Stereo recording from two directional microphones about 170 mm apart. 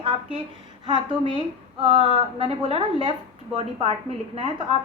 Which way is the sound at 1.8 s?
35° right (ahead or behind).